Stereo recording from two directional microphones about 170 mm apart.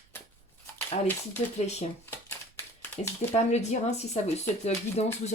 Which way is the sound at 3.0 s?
40° left (ahead or behind).